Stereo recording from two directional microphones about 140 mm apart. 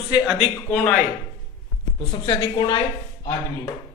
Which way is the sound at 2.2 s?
30° left (ahead or behind).